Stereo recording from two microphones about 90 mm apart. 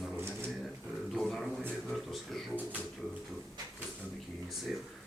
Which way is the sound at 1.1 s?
Centre (ahead or behind).